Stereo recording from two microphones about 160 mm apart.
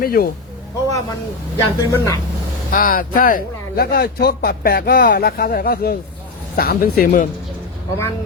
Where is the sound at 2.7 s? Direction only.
60° left (ahead or behind).